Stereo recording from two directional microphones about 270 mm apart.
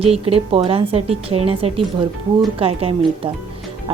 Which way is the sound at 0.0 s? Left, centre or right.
Right.